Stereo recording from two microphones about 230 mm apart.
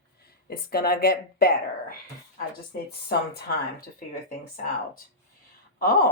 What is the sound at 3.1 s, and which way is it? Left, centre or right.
Speech, left.